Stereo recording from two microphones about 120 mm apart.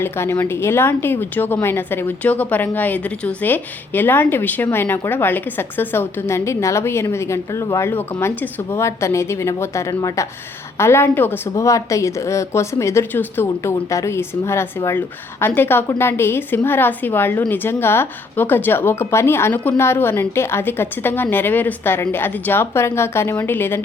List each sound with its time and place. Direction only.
0.0 s a woman's voice: 20° left (ahead or behind)